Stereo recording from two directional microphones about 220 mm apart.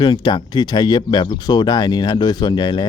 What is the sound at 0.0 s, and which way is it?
Speech, 20° left (ahead or behind).